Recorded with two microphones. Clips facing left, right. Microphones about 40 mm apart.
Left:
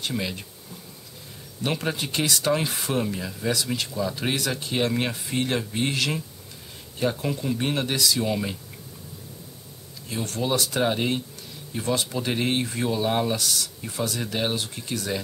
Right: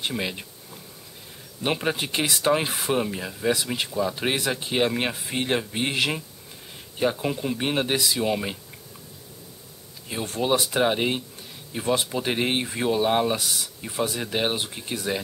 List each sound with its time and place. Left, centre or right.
0.2 s speech: right
1.6 s speech: right
10.0 s speech: right